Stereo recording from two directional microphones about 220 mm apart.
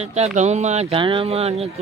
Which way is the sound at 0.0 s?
30° right (ahead or behind).